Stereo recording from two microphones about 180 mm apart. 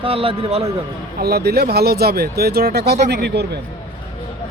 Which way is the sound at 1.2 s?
60° right (ahead or behind).